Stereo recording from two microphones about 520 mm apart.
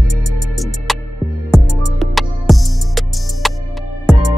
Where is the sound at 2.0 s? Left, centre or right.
Centre.